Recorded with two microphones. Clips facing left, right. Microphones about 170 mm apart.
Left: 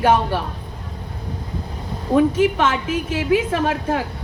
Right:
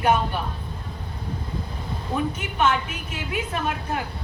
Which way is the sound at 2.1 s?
90° left.